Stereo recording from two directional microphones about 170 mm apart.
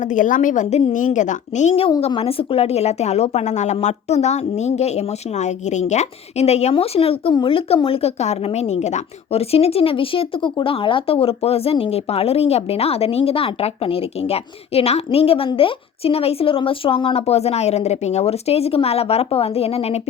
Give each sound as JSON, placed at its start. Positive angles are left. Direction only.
{"t": 0.0, "sound": "a woman's voice", "side_deg": 50}